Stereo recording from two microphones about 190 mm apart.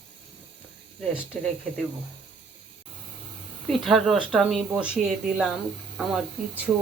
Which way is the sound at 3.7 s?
Centre (ahead or behind).